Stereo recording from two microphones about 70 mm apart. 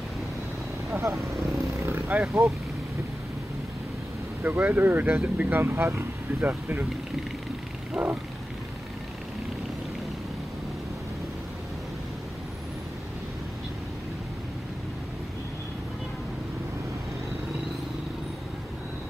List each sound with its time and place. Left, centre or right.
0.9 s speech: right
1.2 s speech: centre
1.9 s speech: right
2.2 s speech: centre
4.4 s speech: right
5.6 s speech: right
8.0 s vehicle: centre